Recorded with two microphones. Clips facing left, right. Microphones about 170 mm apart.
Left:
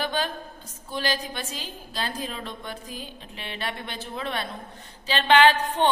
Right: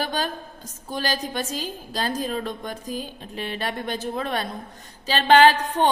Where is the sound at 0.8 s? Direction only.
45° right (ahead or behind).